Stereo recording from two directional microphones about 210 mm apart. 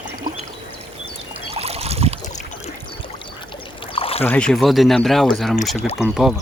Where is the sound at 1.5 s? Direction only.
30° right (ahead or behind).